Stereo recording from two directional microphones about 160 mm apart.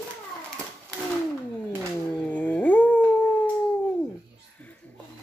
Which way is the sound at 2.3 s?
10° left (ahead or behind).